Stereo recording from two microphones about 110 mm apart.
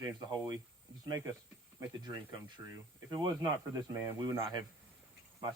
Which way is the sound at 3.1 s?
40° right (ahead or behind).